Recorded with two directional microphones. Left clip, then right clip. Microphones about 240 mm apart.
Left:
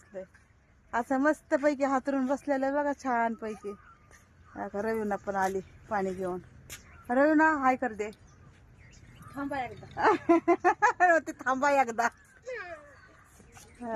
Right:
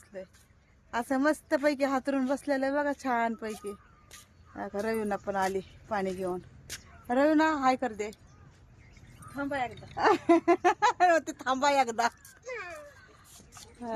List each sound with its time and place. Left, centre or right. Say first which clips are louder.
0.9 s speech: left 1 dB; centre
9.3 s speech: right 2 dB; centre
11.3 s speech: even; centre
12.5 s children playing: even; centre